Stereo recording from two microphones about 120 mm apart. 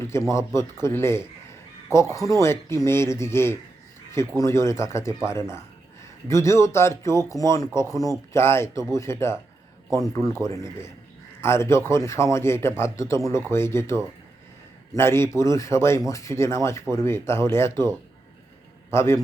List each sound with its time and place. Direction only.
0.1 s a man's voice: 25° left (ahead or behind)
18.9 s a man's voice: 20° left (ahead or behind)